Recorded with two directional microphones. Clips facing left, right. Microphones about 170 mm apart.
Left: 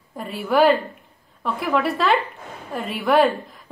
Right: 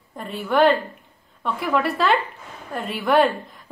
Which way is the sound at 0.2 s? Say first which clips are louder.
Left 1 dB; centre (ahead or behind).